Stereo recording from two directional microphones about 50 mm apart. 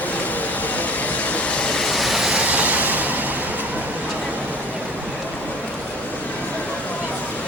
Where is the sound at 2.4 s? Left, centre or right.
Right.